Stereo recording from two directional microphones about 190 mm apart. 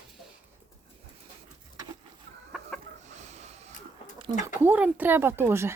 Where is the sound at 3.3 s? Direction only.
35° right (ahead or behind).